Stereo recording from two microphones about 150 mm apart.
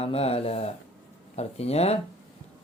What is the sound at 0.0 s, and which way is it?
Speech, 40° left (ahead or behind).